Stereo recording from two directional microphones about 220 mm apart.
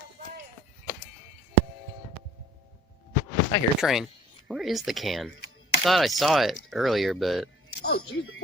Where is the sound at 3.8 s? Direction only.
Centre (ahead or behind).